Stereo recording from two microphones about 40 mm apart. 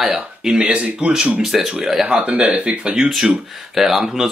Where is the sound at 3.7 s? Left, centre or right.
Centre.